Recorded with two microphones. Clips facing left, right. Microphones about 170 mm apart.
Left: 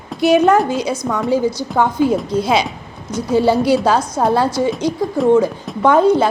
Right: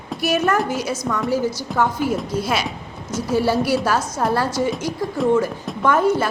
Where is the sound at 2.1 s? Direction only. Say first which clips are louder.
Left 6 dB; centre (ahead or behind).